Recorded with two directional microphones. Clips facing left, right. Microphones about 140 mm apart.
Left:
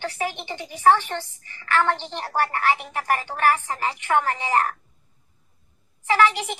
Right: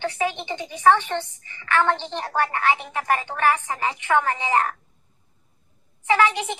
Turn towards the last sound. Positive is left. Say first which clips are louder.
# even
turn(degrees=-20)  # may be behind; listen again after turning